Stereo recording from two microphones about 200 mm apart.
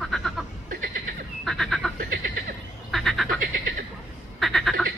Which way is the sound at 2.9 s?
Centre (ahead or behind).